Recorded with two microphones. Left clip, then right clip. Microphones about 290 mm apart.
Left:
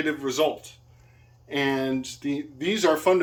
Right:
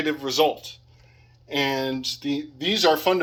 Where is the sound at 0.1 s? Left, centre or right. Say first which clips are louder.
Right 5 dB; centre.